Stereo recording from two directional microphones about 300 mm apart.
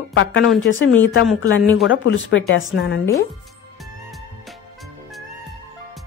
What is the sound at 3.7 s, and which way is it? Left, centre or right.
Music, centre.